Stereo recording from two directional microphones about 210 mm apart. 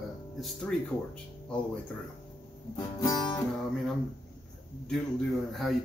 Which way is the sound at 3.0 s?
20° left (ahead or behind).